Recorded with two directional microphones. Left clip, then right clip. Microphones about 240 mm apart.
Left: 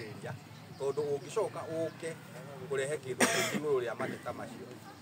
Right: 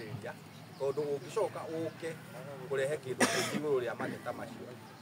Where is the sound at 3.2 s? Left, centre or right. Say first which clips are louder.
Left 2 dB; left.